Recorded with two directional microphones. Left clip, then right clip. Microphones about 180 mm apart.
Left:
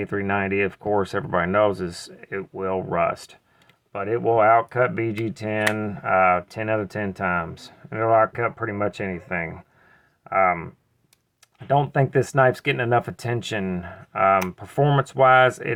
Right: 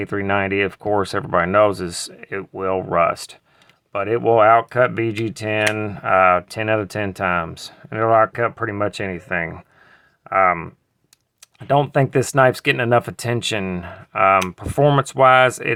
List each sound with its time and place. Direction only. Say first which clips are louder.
0.0 s speech: right 4 dB; 30° right (ahead or behind)
11.7 s speech: right 3 dB; 35° right (ahead or behind)